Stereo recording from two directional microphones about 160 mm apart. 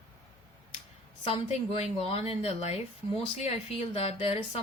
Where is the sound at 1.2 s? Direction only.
40° left (ahead or behind).